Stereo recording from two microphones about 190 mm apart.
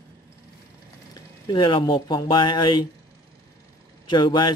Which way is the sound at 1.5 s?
25° left (ahead or behind).